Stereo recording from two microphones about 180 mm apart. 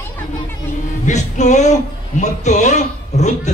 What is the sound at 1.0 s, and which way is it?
A man's voice, 40° left (ahead or behind).